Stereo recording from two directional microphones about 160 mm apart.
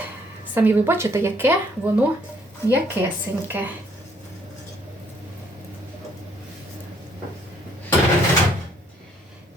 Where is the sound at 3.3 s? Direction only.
15° right (ahead or behind).